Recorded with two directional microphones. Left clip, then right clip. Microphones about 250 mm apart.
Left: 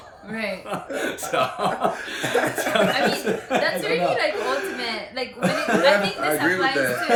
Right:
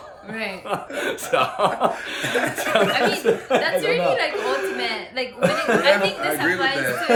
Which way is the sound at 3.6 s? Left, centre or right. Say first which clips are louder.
Right 2 dB; centre.